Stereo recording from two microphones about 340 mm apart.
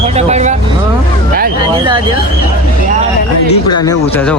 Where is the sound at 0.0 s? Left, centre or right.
Centre.